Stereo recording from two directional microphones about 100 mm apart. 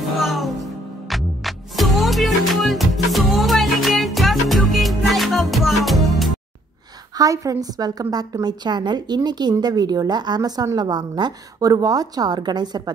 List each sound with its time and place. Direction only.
0.0 s music: centre (ahead or behind)
7.2 s a woman's voice: 35° right (ahead or behind)